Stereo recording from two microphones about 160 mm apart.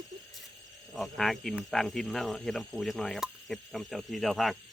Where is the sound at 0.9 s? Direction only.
Centre (ahead or behind).